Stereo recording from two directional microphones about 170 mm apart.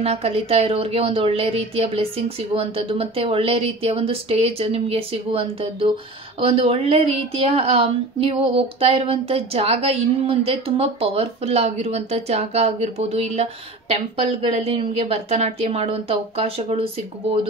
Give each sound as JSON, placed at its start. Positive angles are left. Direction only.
{"t": 0.0, "sound": "a woman's voice", "side_deg": -40}